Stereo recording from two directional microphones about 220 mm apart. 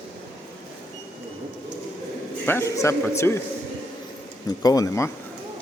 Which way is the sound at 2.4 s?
10° left (ahead or behind).